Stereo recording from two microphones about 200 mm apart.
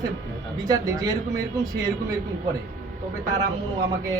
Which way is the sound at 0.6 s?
20° right (ahead or behind).